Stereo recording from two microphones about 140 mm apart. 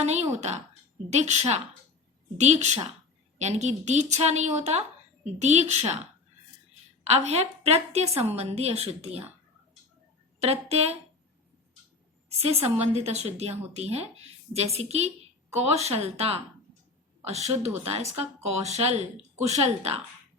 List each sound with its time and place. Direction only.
0.0 s a woman's voice: 50° right (ahead or behind)
7.1 s a woman's voice: 50° right (ahead or behind)
10.4 s a woman's voice: 45° right (ahead or behind)
12.4 s a woman's voice: 45° right (ahead or behind)